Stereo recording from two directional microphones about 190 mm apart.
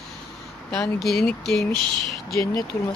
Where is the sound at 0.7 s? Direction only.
Centre (ahead or behind).